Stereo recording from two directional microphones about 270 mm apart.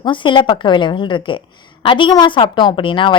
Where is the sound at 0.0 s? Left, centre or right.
Centre.